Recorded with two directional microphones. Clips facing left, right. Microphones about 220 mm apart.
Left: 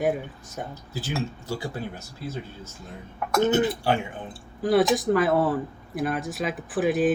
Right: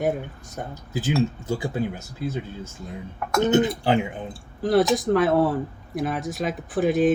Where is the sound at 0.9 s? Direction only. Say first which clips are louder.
Right 7 dB; 15° right (ahead or behind).